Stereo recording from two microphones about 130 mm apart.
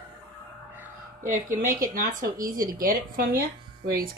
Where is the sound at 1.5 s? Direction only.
90° right.